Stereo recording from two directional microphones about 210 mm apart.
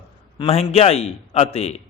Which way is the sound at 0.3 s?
30° left (ahead or behind).